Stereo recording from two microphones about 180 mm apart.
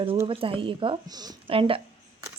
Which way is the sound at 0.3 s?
30° right (ahead or behind).